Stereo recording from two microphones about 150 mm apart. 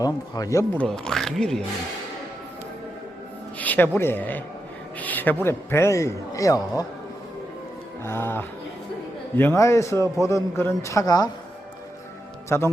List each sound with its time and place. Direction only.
0.0 s a man's voice: 25° left (ahead or behind)
0.8 s speech: 5° left (ahead or behind)
3.6 s a woman's voice: 10° left (ahead or behind)
8.0 s a man's voice: 15° left (ahead or behind)
12.5 s a man's voice: 15° left (ahead or behind)